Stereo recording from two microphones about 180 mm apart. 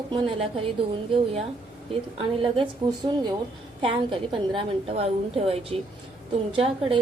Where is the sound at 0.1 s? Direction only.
30° right (ahead or behind).